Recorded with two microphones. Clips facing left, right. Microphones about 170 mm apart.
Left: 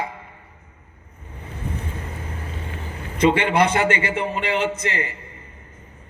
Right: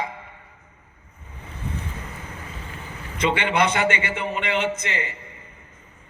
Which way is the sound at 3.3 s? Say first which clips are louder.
Left 3 dB; 35° left (ahead or behind).